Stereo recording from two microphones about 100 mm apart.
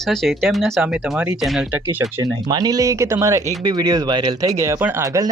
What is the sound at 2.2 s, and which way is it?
Speech, 40° right (ahead or behind).